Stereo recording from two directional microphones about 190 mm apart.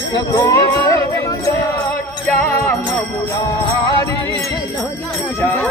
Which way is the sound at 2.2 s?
10° left (ahead or behind).